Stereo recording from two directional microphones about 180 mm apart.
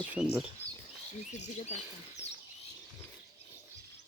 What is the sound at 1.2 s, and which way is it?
Speech, 40° left (ahead or behind).